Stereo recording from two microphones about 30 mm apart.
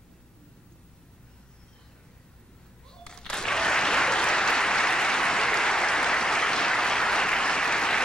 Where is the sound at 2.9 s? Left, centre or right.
Left.